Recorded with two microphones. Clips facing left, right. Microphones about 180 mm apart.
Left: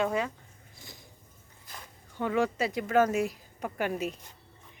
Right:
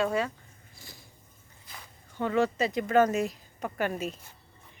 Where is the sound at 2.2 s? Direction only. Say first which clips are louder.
Right 2 dB; 10° left (ahead or behind).